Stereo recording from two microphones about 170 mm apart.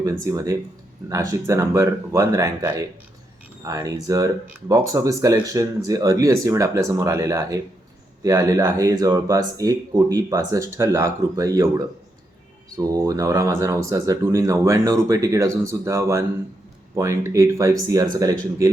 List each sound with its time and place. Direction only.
0.0 s speech: 20° right (ahead or behind)
12.7 s speech: 20° right (ahead or behind)